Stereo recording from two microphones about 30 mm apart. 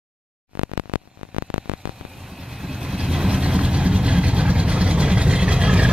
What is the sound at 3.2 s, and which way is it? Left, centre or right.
Vehicle, right.